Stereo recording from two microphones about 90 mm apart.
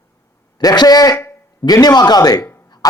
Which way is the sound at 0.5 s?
50° left (ahead or behind).